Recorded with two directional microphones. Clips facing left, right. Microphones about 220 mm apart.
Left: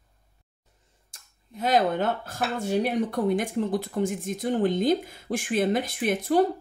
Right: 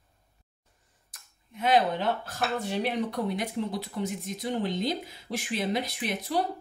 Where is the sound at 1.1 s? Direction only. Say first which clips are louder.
Left 3 dB; 40° left (ahead or behind).